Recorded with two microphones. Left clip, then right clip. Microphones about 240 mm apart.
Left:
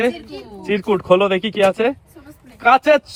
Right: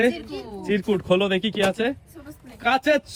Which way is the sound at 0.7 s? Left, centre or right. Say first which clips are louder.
Left 6 dB; left.